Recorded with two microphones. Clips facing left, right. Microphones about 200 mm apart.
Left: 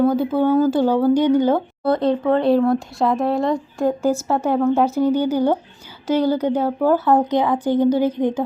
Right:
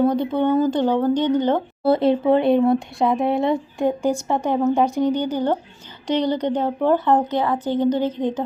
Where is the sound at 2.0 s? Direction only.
25° right (ahead or behind).